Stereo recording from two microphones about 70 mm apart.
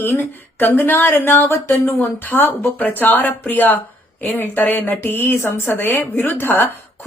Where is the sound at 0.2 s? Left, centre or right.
Left.